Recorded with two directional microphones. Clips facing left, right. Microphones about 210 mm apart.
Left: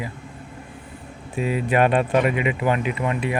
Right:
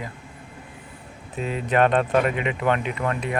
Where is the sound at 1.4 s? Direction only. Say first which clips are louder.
Left 1 dB; 10° left (ahead or behind).